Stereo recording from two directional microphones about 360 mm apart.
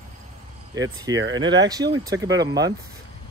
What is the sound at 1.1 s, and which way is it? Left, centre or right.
Speech, right.